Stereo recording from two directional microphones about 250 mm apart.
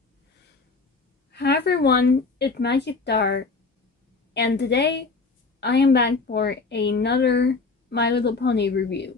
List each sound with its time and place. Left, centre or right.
1.3 s a woman's voice: left